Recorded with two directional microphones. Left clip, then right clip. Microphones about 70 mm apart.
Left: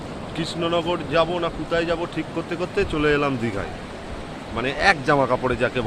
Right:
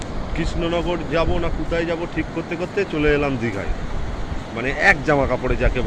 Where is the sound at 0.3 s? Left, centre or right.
Left.